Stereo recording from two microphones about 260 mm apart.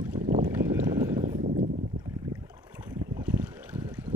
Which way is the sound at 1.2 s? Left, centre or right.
Right.